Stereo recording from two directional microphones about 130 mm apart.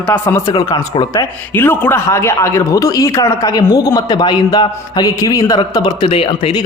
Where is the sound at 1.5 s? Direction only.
15° left (ahead or behind); by 6.6 s 45° left (ahead or behind).